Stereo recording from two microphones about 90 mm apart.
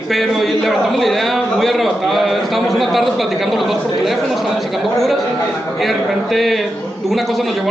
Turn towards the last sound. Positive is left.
turn(degrees=0)  # may be behind; listen again after turning